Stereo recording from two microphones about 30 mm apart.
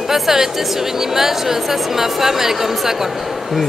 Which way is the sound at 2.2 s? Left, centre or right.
Centre.